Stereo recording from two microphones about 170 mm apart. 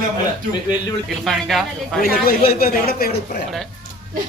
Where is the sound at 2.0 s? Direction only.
60° left (ahead or behind).